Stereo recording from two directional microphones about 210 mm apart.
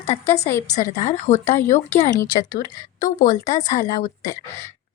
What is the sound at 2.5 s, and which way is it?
A woman's voice, 40° left (ahead or behind).